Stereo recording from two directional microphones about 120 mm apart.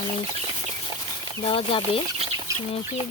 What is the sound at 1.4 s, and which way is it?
Speech, 50° left (ahead or behind).